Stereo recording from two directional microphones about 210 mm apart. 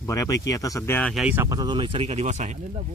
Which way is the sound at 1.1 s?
5° right (ahead or behind).